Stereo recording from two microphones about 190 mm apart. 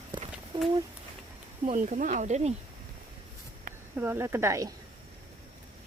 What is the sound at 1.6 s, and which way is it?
Speech, 40° right (ahead or behind).